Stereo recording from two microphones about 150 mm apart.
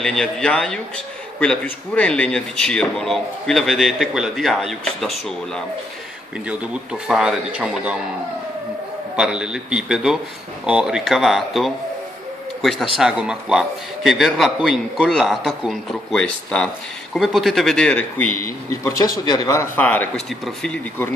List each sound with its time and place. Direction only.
0.0 s a man's voice: 5° left (ahead or behind)
6.4 s a man's voice: 5° right (ahead or behind)
9.1 s a man's voice: 5° right (ahead or behind)
18.3 s speech: 70° left (ahead or behind)
18.9 s a man's voice: 20° left (ahead or behind)